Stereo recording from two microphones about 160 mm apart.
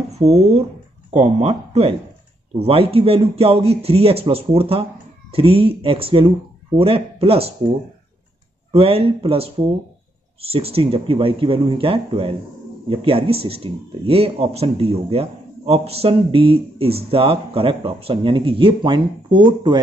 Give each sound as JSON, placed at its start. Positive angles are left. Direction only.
{"t": 0.2, "sound": "speech", "side_deg": -40}
{"t": 8.7, "sound": "speech", "side_deg": -35}